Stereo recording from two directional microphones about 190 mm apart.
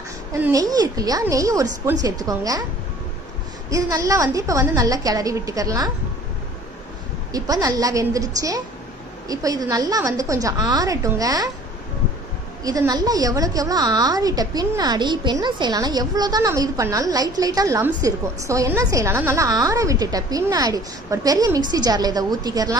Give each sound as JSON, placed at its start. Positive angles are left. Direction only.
{"t": 0.3, "sound": "a woman's voice", "side_deg": -15}
{"t": 3.7, "sound": "a woman's voice", "side_deg": -15}
{"t": 7.3, "sound": "a woman's voice", "side_deg": -20}
{"t": 12.6, "sound": "a woman's voice", "side_deg": -20}